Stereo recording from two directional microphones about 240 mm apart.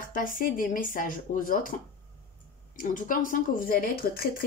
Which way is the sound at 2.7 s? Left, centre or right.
Left.